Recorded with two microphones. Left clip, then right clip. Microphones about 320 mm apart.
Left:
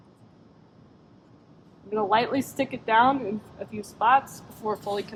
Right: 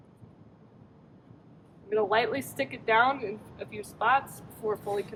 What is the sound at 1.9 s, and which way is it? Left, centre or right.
A woman's voice, left.